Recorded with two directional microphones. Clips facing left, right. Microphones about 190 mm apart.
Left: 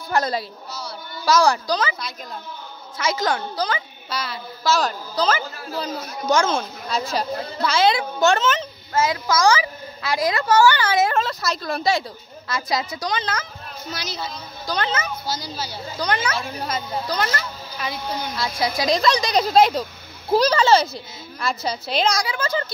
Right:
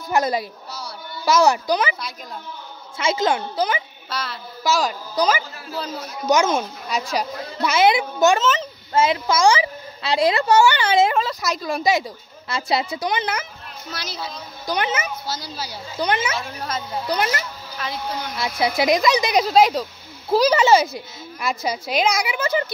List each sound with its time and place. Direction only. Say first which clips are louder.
0.1 s a child's voice: right 2 dB; 15° right (ahead or behind)
4.1 s speech: even; centre (ahead or behind)
4.6 s a woman's voice: even; 15° right (ahead or behind)
8.4 s speech: right 1 dB; centre (ahead or behind)
8.9 s a child's voice: right 2 dB; 25° right (ahead or behind)
11.1 s a woman's voice: right 1 dB; 10° right (ahead or behind)
14.7 s a woman's voice: right 1 dB; 15° right (ahead or behind)
15.2 s a woman's voice: left 1 dB; 5° right (ahead or behind); by 16.3 s 20° right (ahead or behind)
16.6 s speech: left 1 dB; centre (ahead or behind)
17.1 s a woman's voice: right 4 dB; 20° right (ahead or behind)